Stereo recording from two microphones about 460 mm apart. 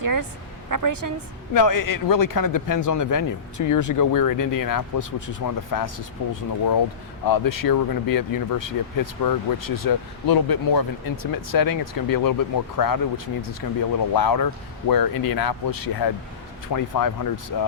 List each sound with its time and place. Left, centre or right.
0.0 s a woman's voice: right
1.5 s a man's voice: left